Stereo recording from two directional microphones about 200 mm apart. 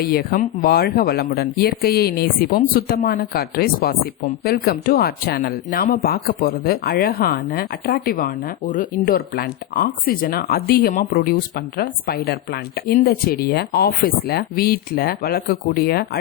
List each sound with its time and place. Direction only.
0.0 s speech: 50° left (ahead or behind)